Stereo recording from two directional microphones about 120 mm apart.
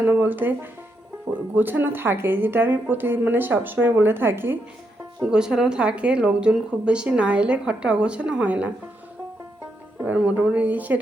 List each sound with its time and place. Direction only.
0.0 s speech: 15° right (ahead or behind)
5.2 s speech: 5° right (ahead or behind)
10.1 s speech: 10° right (ahead or behind)